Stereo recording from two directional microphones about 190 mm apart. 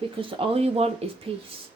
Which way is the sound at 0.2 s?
30° right (ahead or behind).